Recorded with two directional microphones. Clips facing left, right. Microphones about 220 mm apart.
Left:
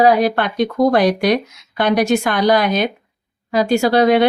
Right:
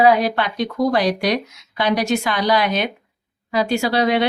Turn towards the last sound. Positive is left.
turn(degrees=50)  # may be behind; listen again after turning